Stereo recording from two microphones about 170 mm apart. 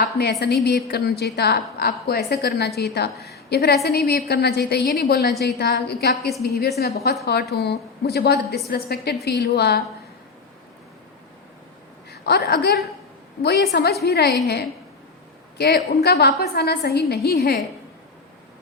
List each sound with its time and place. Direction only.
0.0 s a woman's voice: 70° left (ahead or behind)
4.9 s a woman's voice: 65° left (ahead or behind)
5.4 s a woman's voice: 75° left (ahead or behind)
12.2 s a woman's voice: 70° left (ahead or behind)
16.0 s a woman's voice: 70° left (ahead or behind)